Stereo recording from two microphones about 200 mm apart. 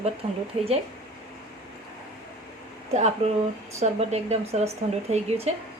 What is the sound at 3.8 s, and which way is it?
Speech, 30° right (ahead or behind).